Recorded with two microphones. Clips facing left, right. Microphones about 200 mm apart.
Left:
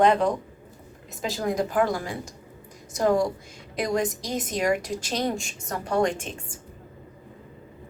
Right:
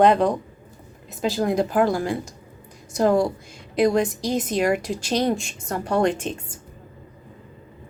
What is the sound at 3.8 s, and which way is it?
Speech, 30° right (ahead or behind).